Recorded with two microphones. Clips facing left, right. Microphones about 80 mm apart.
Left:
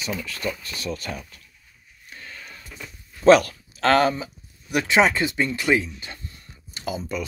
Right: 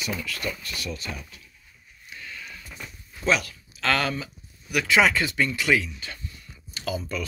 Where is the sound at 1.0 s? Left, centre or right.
Left.